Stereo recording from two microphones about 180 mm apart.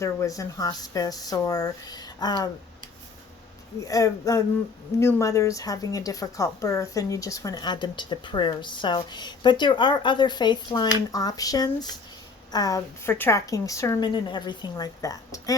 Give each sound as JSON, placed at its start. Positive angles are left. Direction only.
{"t": 0.0, "sound": "speech", "side_deg": 15}
{"t": 3.8, "sound": "speech", "side_deg": 20}